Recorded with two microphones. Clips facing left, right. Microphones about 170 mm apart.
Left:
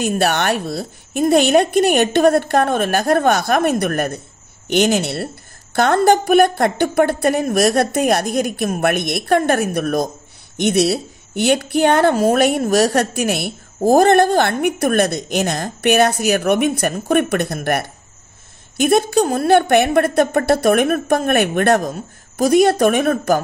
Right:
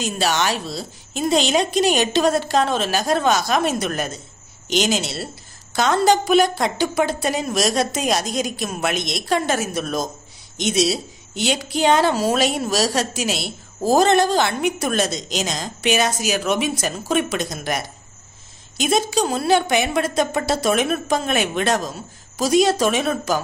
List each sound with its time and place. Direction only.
0.0 s a woman's voice: 60° left (ahead or behind)